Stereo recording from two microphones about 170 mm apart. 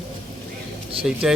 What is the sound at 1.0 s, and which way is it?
Speech, 5° right (ahead or behind).